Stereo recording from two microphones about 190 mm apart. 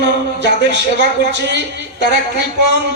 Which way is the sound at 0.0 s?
65° right (ahead or behind).